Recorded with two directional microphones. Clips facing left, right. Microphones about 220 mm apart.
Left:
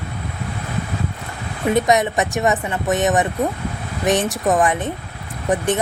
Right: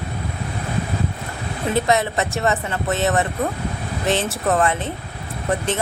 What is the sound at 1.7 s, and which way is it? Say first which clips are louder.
Speech: left 3 dB; 15° left (ahead or behind).